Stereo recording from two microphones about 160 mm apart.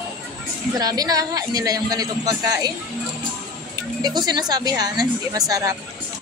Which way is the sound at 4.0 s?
25° right (ahead or behind).